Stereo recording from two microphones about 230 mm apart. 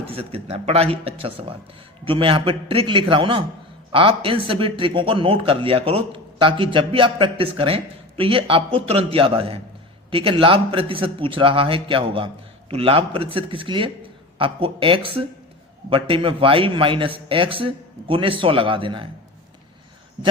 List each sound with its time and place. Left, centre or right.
0.0 s speech: right